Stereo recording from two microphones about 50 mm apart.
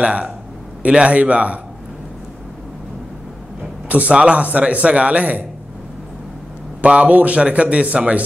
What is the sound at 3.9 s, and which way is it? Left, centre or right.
A man's voice, right.